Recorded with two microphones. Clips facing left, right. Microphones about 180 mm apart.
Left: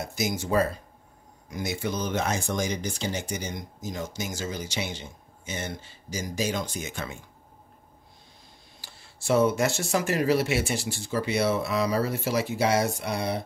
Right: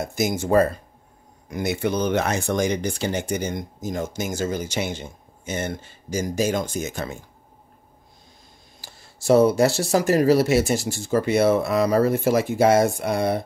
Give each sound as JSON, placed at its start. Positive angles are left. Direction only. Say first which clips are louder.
{"t": 0.0, "sound": "speech", "louder": "right 6 dB", "side_deg": -50}
{"t": 8.8, "sound": "speech", "louder": "right 8 dB", "side_deg": -40}